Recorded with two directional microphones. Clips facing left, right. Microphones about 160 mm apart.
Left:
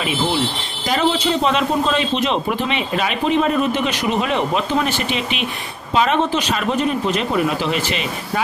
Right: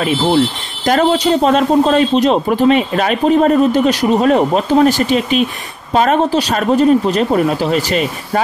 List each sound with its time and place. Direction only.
0.8 s a man's voice: 45° right (ahead or behind)